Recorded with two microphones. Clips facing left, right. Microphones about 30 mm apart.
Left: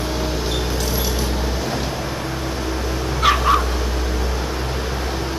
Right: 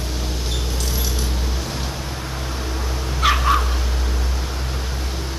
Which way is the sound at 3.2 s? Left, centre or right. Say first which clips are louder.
Left 2 dB; centre.